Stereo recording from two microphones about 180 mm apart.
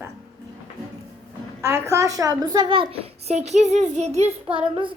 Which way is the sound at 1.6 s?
15° right (ahead or behind).